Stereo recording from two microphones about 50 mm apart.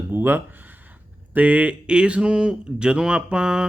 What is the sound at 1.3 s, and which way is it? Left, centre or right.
Speech, right.